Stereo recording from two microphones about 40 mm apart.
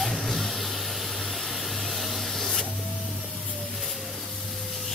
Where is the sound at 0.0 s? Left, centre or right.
Centre.